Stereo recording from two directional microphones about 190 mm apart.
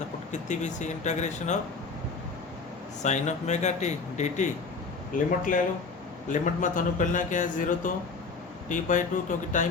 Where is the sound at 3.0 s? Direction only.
40° left (ahead or behind).